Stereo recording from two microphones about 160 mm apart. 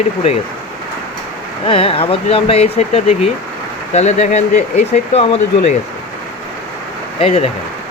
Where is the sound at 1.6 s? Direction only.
35° left (ahead or behind).